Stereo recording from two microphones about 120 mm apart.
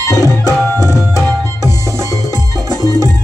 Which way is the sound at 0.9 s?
30° left (ahead or behind).